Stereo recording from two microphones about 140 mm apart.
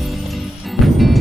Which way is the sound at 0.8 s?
Centre (ahead or behind).